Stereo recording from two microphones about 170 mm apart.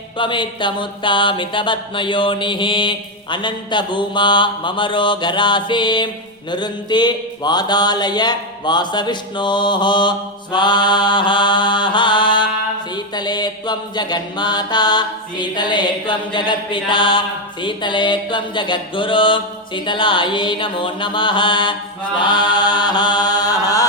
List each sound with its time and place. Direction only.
0.2 s mantra: 30° left (ahead or behind)